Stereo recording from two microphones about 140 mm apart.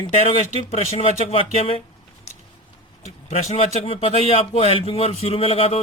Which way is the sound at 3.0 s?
50° left (ahead or behind).